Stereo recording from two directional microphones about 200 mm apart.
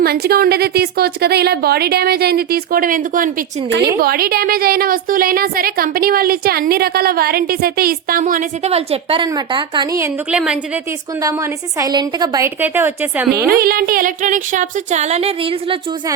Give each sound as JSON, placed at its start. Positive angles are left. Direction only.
{"t": 0.0, "sound": "a woman's voice", "side_deg": -50}
{"t": 10.3, "sound": "a woman's voice", "side_deg": -5}
{"t": 11.8, "sound": "a woman's voice", "side_deg": -20}
{"t": 13.5, "sound": "a sound", "side_deg": -45}